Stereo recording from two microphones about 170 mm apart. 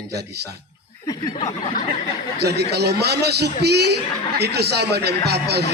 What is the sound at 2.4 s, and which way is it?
A man's voice, 75° right (ahead or behind).